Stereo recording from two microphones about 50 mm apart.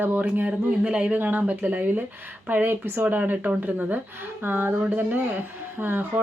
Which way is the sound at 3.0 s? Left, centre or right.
Right.